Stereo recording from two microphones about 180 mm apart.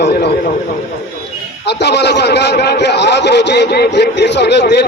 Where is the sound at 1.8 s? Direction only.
70° left (ahead or behind).